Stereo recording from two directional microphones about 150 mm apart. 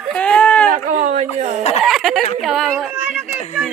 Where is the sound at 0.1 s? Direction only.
5° left (ahead or behind).